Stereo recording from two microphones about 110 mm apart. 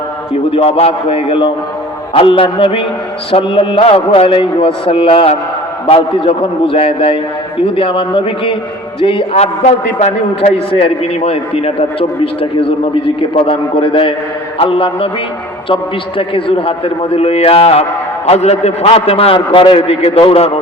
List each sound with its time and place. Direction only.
0.5 s a man's voice: 60° left (ahead or behind)
9.3 s a man's voice: 75° left (ahead or behind)
10.7 s a man's voice: 60° left (ahead or behind)